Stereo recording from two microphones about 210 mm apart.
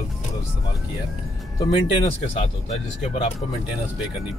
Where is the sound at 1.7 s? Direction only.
25° left (ahead or behind).